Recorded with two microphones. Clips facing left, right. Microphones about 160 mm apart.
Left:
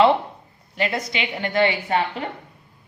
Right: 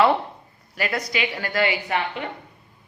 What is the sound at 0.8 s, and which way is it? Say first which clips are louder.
A woman's voice: left 1 dB; 25° left (ahead or behind).